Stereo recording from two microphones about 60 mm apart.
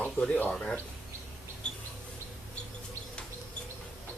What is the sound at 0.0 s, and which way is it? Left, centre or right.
Speech, left.